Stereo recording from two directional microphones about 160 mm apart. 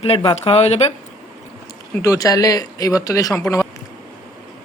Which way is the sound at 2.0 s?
20° left (ahead or behind).